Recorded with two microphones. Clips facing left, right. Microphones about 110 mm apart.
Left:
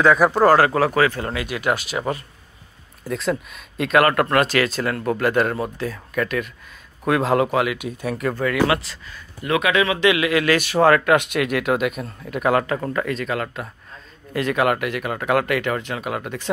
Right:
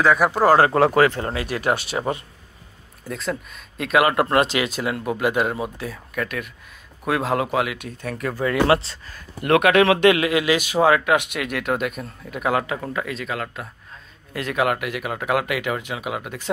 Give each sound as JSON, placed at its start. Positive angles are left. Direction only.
{"t": 0.0, "sound": "speech", "side_deg": 0}
{"t": 0.6, "sound": "speech", "side_deg": -25}
{"t": 1.4, "sound": "speech", "side_deg": -35}
{"t": 3.1, "sound": "speech", "side_deg": 0}
{"t": 4.1, "sound": "speech", "side_deg": -20}
{"t": 8.5, "sound": "speech", "side_deg": -30}
{"t": 9.4, "sound": "speech", "side_deg": -55}
{"t": 10.0, "sound": "speech", "side_deg": -35}
{"t": 10.3, "sound": "speech", "side_deg": -15}